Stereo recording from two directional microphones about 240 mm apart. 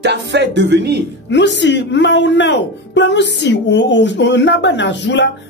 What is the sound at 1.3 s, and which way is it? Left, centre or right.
Speech, left.